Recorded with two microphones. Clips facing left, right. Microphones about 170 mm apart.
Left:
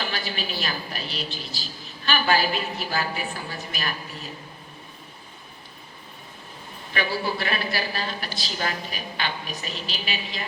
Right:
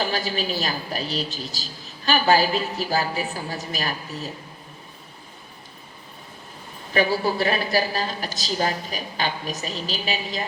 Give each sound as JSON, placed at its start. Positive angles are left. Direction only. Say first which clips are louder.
{"t": 0.0, "sound": "a woman's voice", "louder": "right 5 dB", "side_deg": -40}
{"t": 6.9, "sound": "a woman's voice", "louder": "right 6 dB", "side_deg": -40}